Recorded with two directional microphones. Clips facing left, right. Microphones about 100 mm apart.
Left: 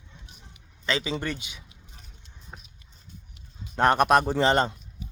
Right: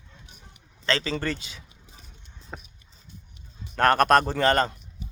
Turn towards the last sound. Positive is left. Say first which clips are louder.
# even
turn(degrees=20)  # may be behind; listen again after turning